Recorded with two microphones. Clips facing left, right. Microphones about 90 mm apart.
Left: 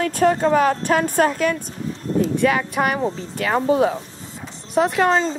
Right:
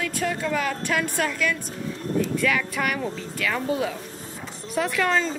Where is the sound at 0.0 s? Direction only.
45° left (ahead or behind).